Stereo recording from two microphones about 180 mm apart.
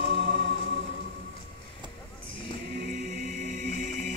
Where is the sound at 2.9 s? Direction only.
45° right (ahead or behind).